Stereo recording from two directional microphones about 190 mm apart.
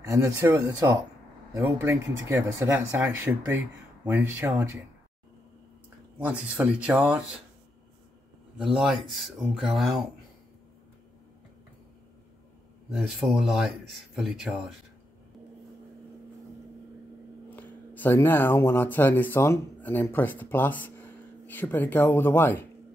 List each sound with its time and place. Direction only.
0.0 s speech: 15° right (ahead or behind)
6.1 s speech: 5° right (ahead or behind)
8.5 s speech: centre (ahead or behind)
12.9 s speech: centre (ahead or behind)
17.5 s speech: 10° left (ahead or behind)